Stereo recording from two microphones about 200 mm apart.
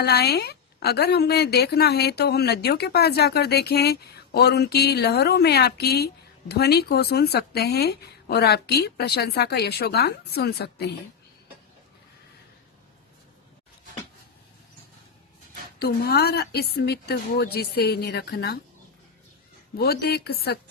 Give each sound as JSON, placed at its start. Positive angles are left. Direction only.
{"t": 0.0, "sound": "a woman's voice", "side_deg": 55}
{"t": 15.8, "sound": "a woman's voice", "side_deg": 50}
{"t": 19.8, "sound": "a woman's voice", "side_deg": 50}